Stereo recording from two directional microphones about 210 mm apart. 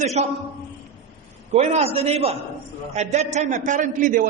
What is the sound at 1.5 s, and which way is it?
A man's voice, 30° right (ahead or behind).